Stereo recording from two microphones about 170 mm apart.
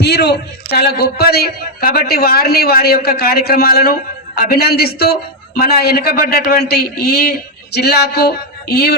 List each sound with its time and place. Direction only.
0.0 s a man's voice: 70° left (ahead or behind)